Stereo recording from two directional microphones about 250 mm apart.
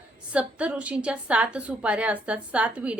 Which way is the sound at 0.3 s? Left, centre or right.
Centre.